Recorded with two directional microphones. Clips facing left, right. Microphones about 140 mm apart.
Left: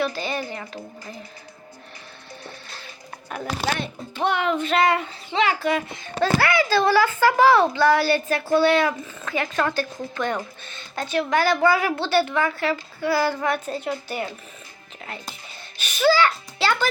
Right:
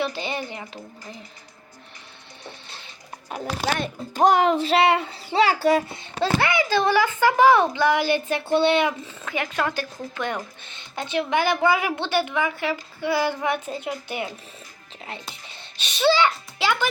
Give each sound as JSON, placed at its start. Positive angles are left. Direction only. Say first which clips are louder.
{"t": 0.0, "sound": "speech", "louder": "left 1 dB", "side_deg": -20}
{"t": 2.4, "sound": "music", "louder": "right 1 dB", "side_deg": -25}
{"t": 4.1, "sound": "speech", "louder": "right 5 dB", "side_deg": -40}
{"t": 6.1, "sound": "a woman's voice", "louder": "left 2 dB", "side_deg": -20}
{"t": 16.0, "sound": "a child's voice", "louder": "left 1 dB", "side_deg": -20}